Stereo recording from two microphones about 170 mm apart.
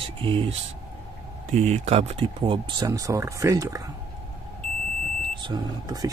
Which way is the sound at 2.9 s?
20° right (ahead or behind).